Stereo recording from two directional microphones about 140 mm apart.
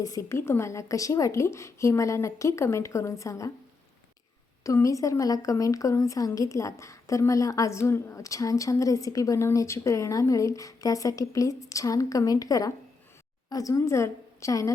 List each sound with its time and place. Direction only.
0.0 s a woman's voice: 25° left (ahead or behind)
4.6 s a woman's voice: 25° left (ahead or behind)